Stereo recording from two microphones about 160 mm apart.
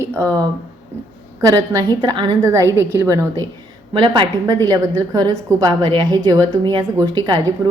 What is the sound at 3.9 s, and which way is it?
A woman's voice, 30° right (ahead or behind).